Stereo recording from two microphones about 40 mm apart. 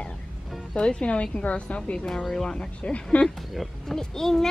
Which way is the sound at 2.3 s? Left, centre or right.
Centre.